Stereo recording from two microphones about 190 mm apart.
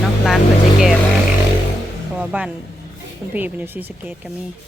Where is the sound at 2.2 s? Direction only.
5° right (ahead or behind).